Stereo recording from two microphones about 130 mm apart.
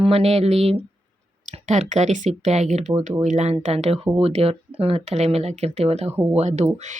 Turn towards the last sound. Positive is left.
turn(degrees=-60)  # may be behind; listen again after turning